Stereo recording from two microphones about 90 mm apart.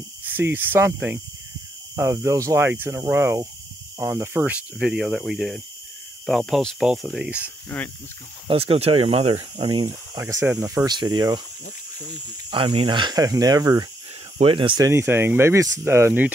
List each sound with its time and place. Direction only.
0.2 s speech: 25° right (ahead or behind)
4.7 s speech: 5° right (ahead or behind)
7.2 s speech: 20° right (ahead or behind)
8.5 s speech: 90° right; by 9.9 s 65° right (ahead or behind)
10.1 s speech: 30° right (ahead or behind)
10.9 s speech: 55° right (ahead or behind)
12.4 s speech: 60° right (ahead or behind); by 13.8 s 45° right (ahead or behind)
14.4 s speech: 75° right (ahead or behind)
14.9 s speech: 30° right (ahead or behind)